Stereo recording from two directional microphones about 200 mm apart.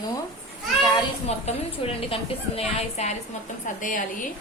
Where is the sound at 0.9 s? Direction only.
30° left (ahead or behind).